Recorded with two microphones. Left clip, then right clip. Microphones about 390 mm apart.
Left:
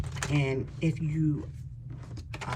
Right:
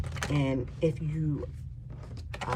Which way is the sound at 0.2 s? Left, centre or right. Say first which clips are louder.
Even; centre.